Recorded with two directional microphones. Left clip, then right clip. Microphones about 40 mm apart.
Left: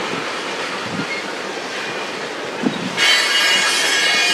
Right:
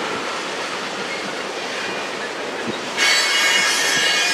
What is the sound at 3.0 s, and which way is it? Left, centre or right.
Train wheels squealing, centre.